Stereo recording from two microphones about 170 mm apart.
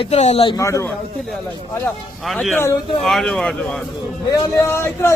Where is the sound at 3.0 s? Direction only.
Centre (ahead or behind).